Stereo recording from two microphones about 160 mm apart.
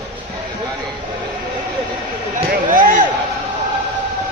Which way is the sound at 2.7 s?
55° right (ahead or behind).